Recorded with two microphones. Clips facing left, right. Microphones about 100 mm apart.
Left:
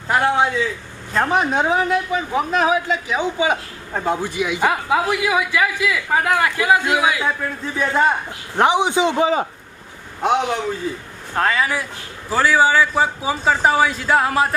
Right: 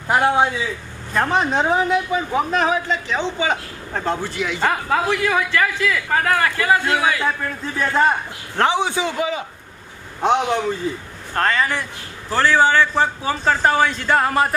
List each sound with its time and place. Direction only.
0.1 s a man's voice: 5° right (ahead or behind)
8.5 s a man's voice: 15° left (ahead or behind)
11.3 s a man's voice: 5° left (ahead or behind)